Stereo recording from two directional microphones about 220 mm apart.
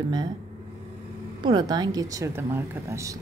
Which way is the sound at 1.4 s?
20° right (ahead or behind).